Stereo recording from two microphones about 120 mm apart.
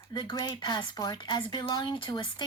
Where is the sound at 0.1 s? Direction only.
35° left (ahead or behind).